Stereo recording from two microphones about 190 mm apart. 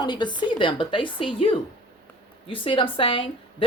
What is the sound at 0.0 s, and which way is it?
A woman's voice, 25° left (ahead or behind).